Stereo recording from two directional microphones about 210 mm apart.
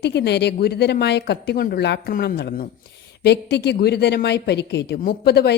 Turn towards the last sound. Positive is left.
turn(degrees=50)  # may be behind; listen again after turning